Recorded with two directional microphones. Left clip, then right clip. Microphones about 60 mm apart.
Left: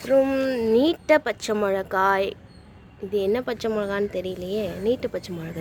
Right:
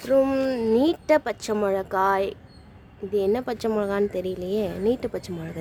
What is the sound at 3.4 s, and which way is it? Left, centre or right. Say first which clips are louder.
Speech: left 1 dB; right.